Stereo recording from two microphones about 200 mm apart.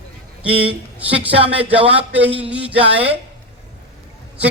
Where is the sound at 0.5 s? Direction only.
30° right (ahead or behind).